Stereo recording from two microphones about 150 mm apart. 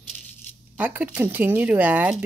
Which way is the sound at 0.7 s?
10° right (ahead or behind).